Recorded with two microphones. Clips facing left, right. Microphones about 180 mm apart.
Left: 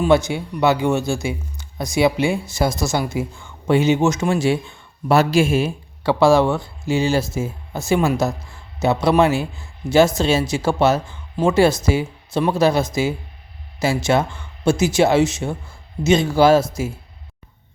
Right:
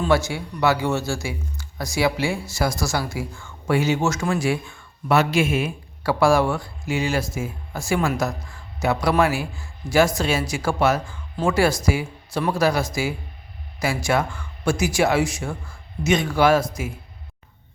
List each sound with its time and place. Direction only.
0.0 s speech: 20° left (ahead or behind)
5.0 s speech: 35° left (ahead or behind)